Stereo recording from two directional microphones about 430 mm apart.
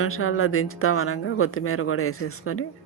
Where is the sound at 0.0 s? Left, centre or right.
Left.